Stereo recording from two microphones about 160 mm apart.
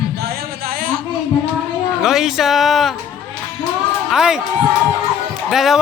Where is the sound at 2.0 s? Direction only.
Centre (ahead or behind).